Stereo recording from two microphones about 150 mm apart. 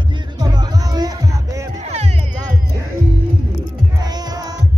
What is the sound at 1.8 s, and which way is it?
Music, 45° right (ahead or behind).